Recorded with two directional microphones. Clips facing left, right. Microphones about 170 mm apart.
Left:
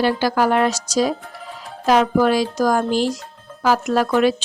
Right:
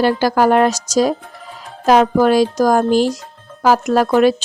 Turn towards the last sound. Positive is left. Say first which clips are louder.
# right 4 dB
turn(degrees=-45)  # may be behind; listen again after turning